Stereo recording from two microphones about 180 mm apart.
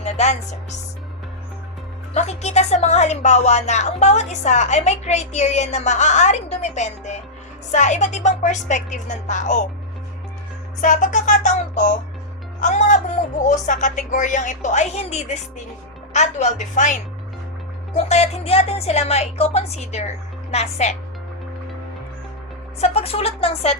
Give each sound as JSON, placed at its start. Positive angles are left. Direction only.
{"t": 0.0, "sound": "speech", "side_deg": 40}
{"t": 2.1, "sound": "speech", "side_deg": 35}
{"t": 10.8, "sound": "speech", "side_deg": 45}
{"t": 17.9, "sound": "speech", "side_deg": 35}
{"t": 22.8, "sound": "speech", "side_deg": 35}